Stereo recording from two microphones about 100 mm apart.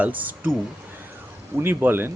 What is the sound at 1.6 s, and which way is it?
Speech, 20° right (ahead or behind).